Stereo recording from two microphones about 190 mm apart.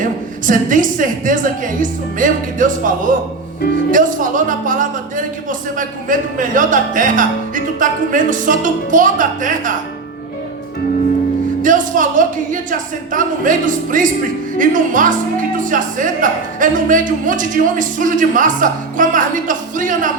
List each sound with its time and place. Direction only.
0.0 s speech: 45° right (ahead or behind)
11.6 s speech: 45° right (ahead or behind)